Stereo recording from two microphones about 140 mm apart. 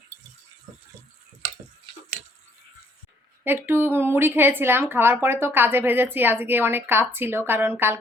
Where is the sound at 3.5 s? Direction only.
15° right (ahead or behind).